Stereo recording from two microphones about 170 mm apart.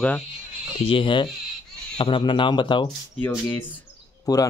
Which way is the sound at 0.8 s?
30° left (ahead or behind).